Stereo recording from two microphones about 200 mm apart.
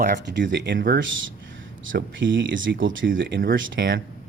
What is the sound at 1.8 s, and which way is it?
Speech, 65° right (ahead or behind).